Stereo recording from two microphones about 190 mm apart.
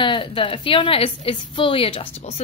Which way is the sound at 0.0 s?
25° left (ahead or behind).